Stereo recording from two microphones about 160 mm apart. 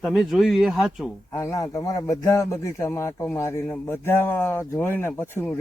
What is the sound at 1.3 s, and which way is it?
A man's voice, 20° left (ahead or behind).